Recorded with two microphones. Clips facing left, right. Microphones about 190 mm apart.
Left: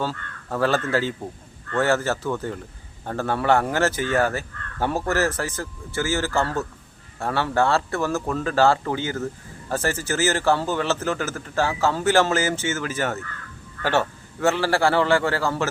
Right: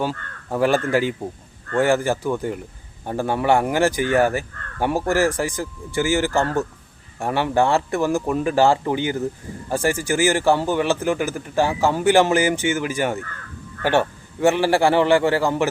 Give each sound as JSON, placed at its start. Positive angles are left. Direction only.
{"t": 0.0, "sound": "speech", "side_deg": -15}